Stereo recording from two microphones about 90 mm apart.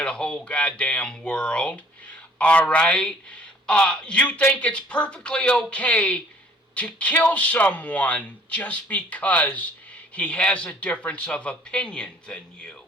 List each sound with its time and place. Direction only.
0.0 s speech: 10° left (ahead or behind)